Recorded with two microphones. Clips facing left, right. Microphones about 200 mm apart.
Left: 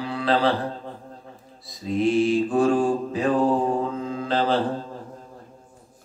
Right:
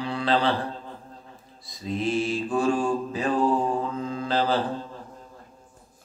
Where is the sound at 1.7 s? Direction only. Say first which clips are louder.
Left 5 dB; centre (ahead or behind).